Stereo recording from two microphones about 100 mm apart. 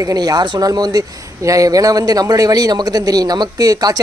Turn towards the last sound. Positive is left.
turn(degrees=-40)  # may be behind; listen again after turning